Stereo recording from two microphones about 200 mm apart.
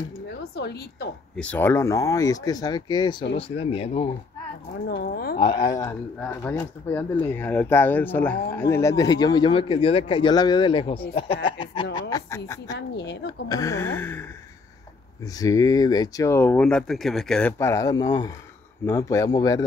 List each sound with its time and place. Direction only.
0.4 s a woman's voice: 55° left (ahead or behind)
1.3 s speech: 5° left (ahead or behind); by 4.1 s 30° left (ahead or behind)
4.8 s a woman's voice: 50° left (ahead or behind)
5.4 s a woman's voice: 20° left (ahead or behind)
12.7 s a woman's voice: 60° left (ahead or behind)
13.5 s speech: 15° left (ahead or behind)
15.3 s speech: 15° left (ahead or behind)